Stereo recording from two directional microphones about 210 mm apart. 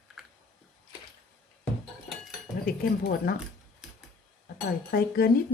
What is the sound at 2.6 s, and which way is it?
Speech, 45° left (ahead or behind).